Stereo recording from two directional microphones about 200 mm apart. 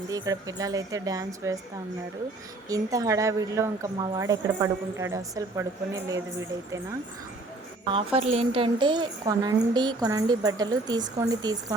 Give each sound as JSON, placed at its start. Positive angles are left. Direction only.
{"t": 0.1, "sound": "a woman's voice", "side_deg": -15}
{"t": 2.6, "sound": "a woman's voice", "side_deg": -15}
{"t": 7.9, "sound": "a woman's voice", "side_deg": -30}